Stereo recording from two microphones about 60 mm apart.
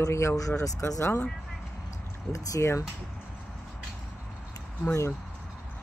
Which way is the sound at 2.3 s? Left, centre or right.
Left.